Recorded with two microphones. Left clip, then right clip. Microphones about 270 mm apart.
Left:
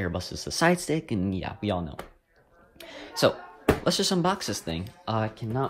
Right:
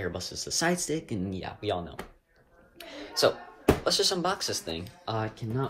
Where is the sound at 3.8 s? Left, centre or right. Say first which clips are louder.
Left 1 dB; left.